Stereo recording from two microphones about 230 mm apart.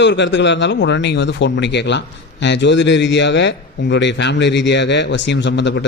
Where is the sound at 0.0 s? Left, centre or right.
Left.